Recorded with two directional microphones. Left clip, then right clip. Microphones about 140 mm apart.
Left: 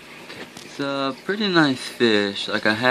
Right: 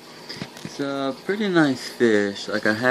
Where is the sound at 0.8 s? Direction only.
10° left (ahead or behind).